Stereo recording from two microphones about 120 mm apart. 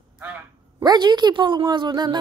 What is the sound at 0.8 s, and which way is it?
A woman's voice, 35° right (ahead or behind).